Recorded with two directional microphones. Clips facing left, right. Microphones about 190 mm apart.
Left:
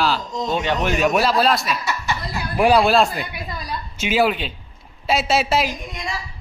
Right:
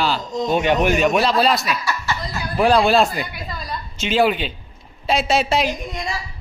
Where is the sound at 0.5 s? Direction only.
15° right (ahead or behind).